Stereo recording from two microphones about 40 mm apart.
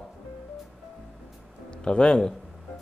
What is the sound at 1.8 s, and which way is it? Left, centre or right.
Speech, left.